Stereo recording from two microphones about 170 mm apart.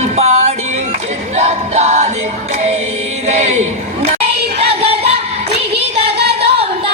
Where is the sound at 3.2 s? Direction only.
40° right (ahead or behind).